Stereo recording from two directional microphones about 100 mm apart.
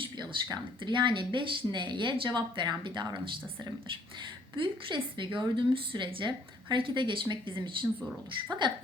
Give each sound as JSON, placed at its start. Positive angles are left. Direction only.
{"t": 0.9, "sound": "speech", "side_deg": -50}
{"t": 4.5, "sound": "a woman's voice", "side_deg": -55}